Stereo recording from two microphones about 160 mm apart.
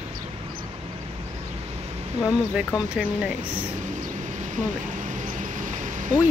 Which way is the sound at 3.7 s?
50° right (ahead or behind).